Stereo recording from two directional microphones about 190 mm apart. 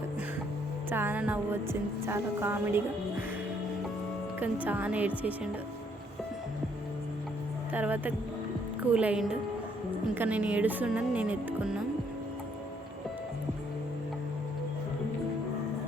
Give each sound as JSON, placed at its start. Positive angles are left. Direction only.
{"t": 0.9, "sound": "speech", "side_deg": -10}
{"t": 4.6, "sound": "speech", "side_deg": -10}
{"t": 7.7, "sound": "speech", "side_deg": -10}